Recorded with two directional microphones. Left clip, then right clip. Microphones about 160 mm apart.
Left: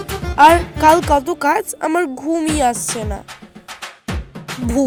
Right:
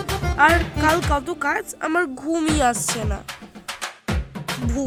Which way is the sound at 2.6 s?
15° left (ahead or behind).